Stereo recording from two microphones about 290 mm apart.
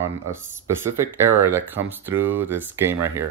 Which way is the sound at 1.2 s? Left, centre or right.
Centre.